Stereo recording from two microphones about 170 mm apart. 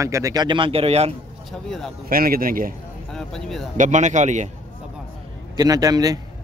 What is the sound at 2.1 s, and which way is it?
Speech, 60° right (ahead or behind).